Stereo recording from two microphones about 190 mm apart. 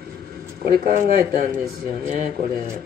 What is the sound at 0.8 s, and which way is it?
Speech, 50° right (ahead or behind).